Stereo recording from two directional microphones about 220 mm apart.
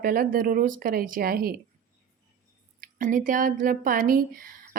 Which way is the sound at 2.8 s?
40° right (ahead or behind).